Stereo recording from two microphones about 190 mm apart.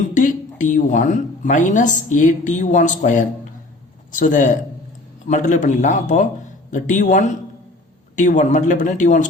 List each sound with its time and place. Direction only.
0.2 s a woman's voice: 40° left (ahead or behind)